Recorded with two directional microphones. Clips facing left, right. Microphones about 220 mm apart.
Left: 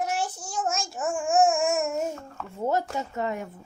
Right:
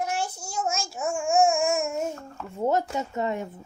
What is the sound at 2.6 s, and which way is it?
Speech, 20° right (ahead or behind).